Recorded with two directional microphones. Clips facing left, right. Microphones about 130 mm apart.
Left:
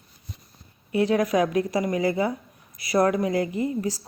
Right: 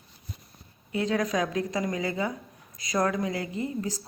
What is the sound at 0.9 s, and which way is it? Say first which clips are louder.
Speech: left 5 dB; 25° left (ahead or behind).